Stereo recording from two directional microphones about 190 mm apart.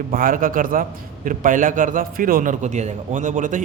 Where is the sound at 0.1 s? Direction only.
50° right (ahead or behind).